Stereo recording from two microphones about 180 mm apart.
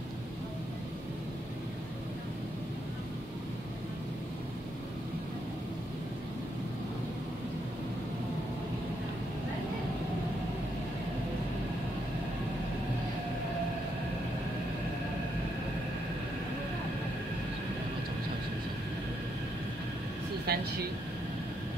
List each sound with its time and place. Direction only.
20.5 s vehicle: 60° right (ahead or behind)